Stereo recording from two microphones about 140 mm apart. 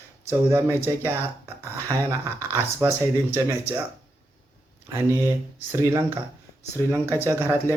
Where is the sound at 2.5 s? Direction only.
15° right (ahead or behind).